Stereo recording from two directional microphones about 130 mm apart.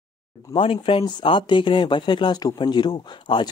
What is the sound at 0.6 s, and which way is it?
Speech, 45° left (ahead or behind).